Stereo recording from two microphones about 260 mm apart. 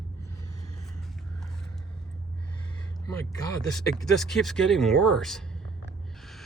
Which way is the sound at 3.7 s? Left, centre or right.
Centre.